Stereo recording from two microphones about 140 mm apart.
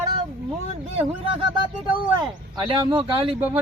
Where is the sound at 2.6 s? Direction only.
35° right (ahead or behind).